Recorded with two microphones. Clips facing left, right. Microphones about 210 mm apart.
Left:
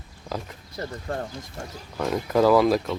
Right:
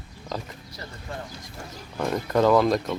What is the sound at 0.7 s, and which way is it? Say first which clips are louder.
Speech: left 7 dB; 45° left (ahead or behind).